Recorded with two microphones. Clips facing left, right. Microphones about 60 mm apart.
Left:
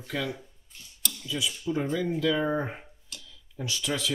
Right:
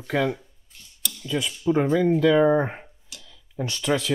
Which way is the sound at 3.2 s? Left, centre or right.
Right.